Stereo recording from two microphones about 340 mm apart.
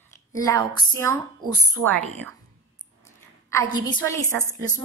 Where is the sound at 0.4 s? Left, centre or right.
Centre.